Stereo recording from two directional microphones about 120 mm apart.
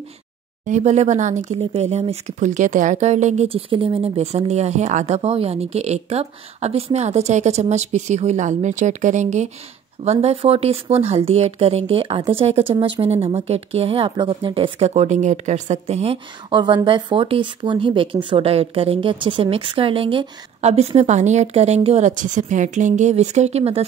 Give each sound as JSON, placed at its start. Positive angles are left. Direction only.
{"t": 0.7, "sound": "speech", "side_deg": -75}
{"t": 1.6, "sound": "a woman's voice", "side_deg": -60}
{"t": 3.4, "sound": "a woman's voice", "side_deg": -50}
{"t": 10.2, "sound": "a woman's voice", "side_deg": -55}